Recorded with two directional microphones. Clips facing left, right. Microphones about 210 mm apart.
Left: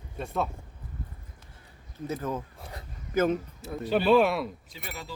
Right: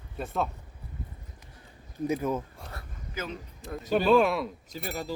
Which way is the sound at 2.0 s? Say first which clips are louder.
Right 4 dB; 10° right (ahead or behind).